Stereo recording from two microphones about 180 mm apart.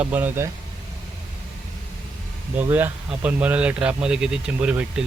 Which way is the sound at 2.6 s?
10° right (ahead or behind).